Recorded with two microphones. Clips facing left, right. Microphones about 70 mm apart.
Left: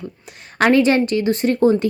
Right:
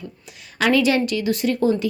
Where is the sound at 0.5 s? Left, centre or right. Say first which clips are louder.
Left 4 dB; left.